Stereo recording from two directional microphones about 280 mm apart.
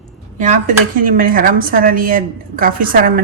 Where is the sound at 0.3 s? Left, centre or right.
Right.